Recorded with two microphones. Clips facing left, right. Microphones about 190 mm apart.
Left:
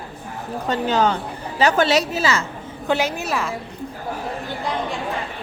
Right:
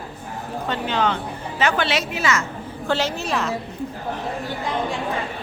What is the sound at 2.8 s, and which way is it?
Speech, 15° left (ahead or behind).